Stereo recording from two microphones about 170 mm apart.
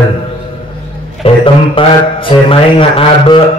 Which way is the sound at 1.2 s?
30° left (ahead or behind).